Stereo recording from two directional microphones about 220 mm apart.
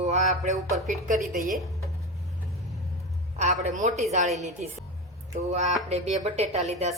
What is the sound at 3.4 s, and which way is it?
Speech, 35° right (ahead or behind).